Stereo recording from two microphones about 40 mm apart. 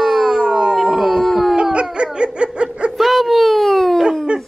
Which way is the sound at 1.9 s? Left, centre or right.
Right.